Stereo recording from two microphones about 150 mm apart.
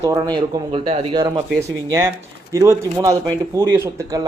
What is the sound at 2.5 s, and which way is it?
Speech, 15° right (ahead or behind).